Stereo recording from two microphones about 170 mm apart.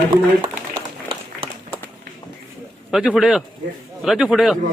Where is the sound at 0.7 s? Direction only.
30° right (ahead or behind).